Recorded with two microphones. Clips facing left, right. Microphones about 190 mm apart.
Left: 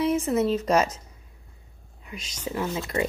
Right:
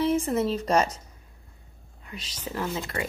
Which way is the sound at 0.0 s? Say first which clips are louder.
Even; 35° right (ahead or behind).